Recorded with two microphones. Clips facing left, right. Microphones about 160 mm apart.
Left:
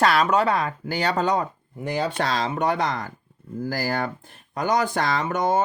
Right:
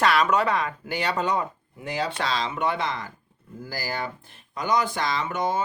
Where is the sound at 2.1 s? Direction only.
50° left (ahead or behind).